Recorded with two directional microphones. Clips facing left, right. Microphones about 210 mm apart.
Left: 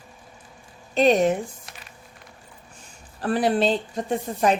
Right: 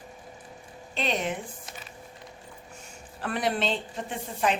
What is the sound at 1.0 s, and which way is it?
Speech, 45° left (ahead or behind).